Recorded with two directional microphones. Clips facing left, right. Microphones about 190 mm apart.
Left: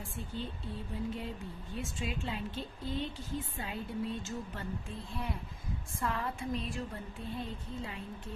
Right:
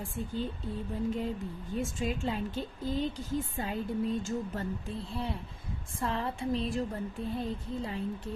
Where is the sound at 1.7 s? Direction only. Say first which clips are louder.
Right 6 dB; 45° right (ahead or behind).